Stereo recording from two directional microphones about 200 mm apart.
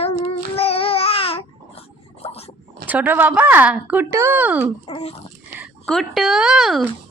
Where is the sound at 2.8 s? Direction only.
10° right (ahead or behind).